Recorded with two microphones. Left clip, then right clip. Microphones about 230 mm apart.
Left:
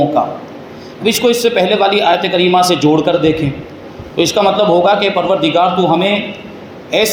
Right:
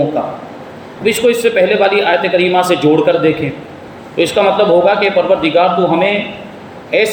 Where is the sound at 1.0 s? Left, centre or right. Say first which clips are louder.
Right 1 dB; left.